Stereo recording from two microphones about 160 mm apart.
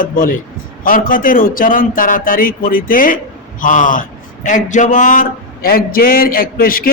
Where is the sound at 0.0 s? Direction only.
60° left (ahead or behind).